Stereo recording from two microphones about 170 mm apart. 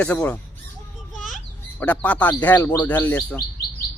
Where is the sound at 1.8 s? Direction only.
10° left (ahead or behind).